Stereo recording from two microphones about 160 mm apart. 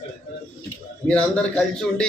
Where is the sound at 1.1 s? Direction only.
5° left (ahead or behind).